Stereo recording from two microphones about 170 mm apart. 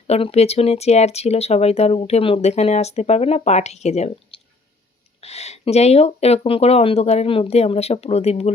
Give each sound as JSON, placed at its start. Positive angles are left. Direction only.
{"t": 0.1, "sound": "speech", "side_deg": 35}